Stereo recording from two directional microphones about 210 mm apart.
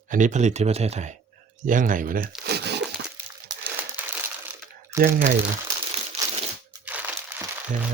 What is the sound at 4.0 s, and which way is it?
Crumpling, 10° right (ahead or behind).